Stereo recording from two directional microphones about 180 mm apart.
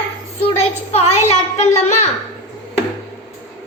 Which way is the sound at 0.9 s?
35° left (ahead or behind).